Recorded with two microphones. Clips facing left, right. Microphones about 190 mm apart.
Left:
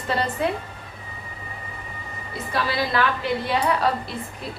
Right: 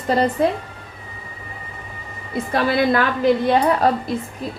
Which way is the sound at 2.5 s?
50° right (ahead or behind).